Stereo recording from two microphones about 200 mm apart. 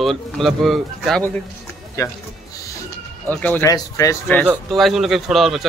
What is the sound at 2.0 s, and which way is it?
Speech, 15° left (ahead or behind).